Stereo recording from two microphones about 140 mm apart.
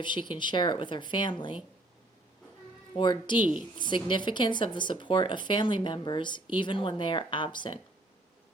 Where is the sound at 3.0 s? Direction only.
35° left (ahead or behind).